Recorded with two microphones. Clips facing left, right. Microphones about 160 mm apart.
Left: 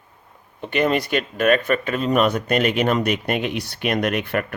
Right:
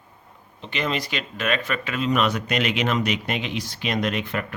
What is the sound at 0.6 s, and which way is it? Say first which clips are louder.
Speech: left 7 dB; 50° left (ahead or behind).